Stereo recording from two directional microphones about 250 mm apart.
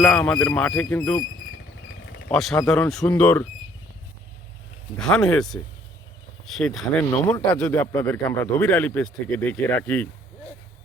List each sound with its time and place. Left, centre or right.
0.0 s speech: centre
1.5 s vehicle: left
2.3 s speech: centre
4.9 s speech: centre